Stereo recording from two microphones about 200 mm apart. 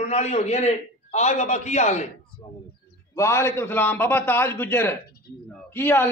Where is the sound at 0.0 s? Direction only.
35° left (ahead or behind).